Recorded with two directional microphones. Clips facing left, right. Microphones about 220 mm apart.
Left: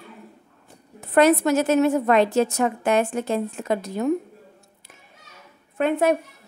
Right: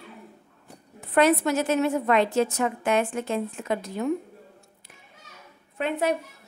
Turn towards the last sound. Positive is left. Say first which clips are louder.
# left 5 dB
turn(degrees=50)  # may be behind; listen again after turning